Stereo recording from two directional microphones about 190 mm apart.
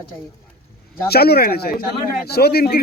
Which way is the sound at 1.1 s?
55° left (ahead or behind).